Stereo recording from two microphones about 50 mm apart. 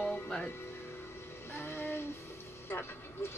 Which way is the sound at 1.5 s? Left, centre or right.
Left.